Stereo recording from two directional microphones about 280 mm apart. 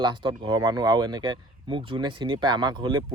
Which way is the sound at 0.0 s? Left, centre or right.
Centre.